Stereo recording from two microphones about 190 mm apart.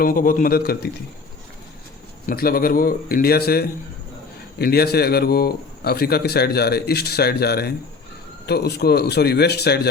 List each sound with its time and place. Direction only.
0.0 s speech: 45° left (ahead or behind)
2.2 s a man's voice: 50° left (ahead or behind)